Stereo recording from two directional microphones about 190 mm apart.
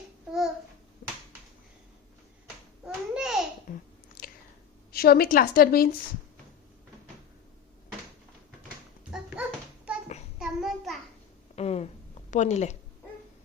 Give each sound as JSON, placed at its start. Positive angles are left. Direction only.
{"t": 0.3, "sound": "babbling", "side_deg": 0}
{"t": 2.8, "sound": "babbling", "side_deg": -5}
{"t": 3.7, "sound": "chewing", "side_deg": 45}
{"t": 4.9, "sound": "a woman's voice", "side_deg": 55}
{"t": 9.1, "sound": "a sound", "side_deg": -5}
{"t": 10.3, "sound": "child singing", "side_deg": 0}
{"t": 11.5, "sound": "a sound", "side_deg": 35}
{"t": 12.3, "sound": "a woman's voice", "side_deg": 40}